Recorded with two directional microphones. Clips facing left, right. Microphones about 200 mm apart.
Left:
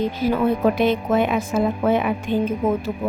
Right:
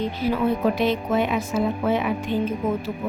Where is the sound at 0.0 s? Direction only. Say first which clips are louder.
Left 3 dB; 45° left (ahead or behind).